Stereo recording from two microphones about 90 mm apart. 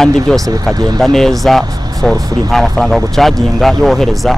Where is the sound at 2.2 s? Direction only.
45° right (ahead or behind).